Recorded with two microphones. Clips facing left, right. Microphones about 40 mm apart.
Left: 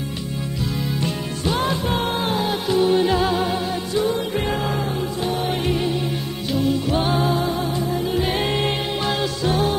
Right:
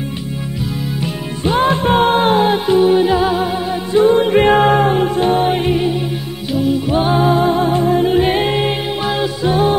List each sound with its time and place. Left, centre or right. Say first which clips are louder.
1.4 s music: right 8 dB; right
2.6 s music: right 7 dB; right
2.9 s music: right 5 dB; centre
3.9 s music: right 12 dB; right
5.7 s music: right 6 dB; centre
6.5 s music: right 5 dB; centre
7.4 s music: right 9 dB; right
8.3 s music: right 6 dB; right